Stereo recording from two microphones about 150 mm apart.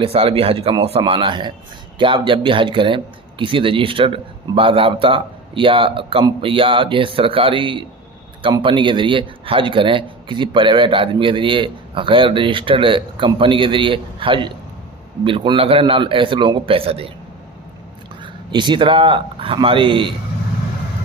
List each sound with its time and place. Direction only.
0.0 s a man's voice: 40° right (ahead or behind)
18.2 s speech: 30° right (ahead or behind)